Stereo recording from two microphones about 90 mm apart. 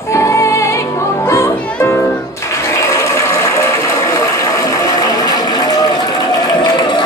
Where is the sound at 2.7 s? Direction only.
35° left (ahead or behind).